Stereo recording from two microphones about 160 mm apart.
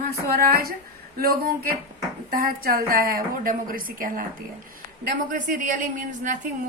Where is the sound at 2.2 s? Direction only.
65° right (ahead or behind).